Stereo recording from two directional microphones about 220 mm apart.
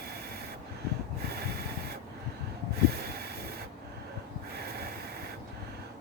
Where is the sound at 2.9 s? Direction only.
45° right (ahead or behind).